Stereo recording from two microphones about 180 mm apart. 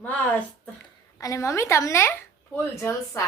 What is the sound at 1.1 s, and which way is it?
A woman's voice, 15° left (ahead or behind).